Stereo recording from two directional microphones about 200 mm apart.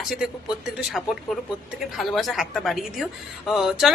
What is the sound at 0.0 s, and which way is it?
A woman's voice, 5° right (ahead or behind).